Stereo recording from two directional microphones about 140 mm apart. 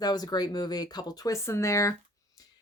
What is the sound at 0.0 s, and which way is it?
Speech, 30° left (ahead or behind).